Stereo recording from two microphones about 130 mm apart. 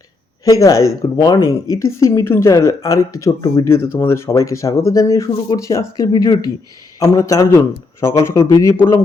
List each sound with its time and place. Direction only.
0.4 s speech: 25° left (ahead or behind)